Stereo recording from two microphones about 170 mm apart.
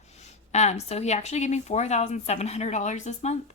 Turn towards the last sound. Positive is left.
turn(degrees=40)  # may be behind; listen again after turning